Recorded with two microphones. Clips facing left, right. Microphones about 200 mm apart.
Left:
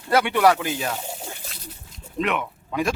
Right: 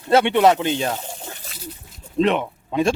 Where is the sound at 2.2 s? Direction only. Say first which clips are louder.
Right 6 dB; 30° right (ahead or behind).